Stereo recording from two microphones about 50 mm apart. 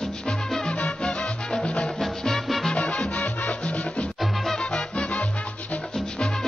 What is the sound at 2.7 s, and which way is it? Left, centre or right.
Salsa music, left.